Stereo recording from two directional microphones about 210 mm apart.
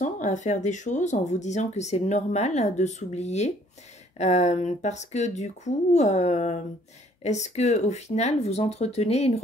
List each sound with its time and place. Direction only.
0.0 s speech: 35° left (ahead or behind)